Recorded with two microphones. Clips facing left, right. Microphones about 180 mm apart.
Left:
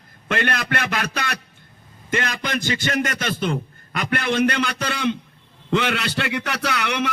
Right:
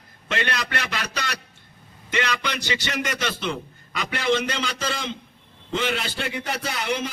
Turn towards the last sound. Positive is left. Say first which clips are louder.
# left 3 dB
turn(degrees=70)  # may be behind; listen again after turning